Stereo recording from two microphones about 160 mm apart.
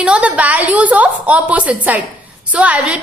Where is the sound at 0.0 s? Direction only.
5° right (ahead or behind).